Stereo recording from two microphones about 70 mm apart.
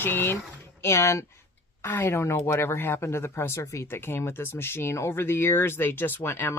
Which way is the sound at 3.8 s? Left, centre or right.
Left.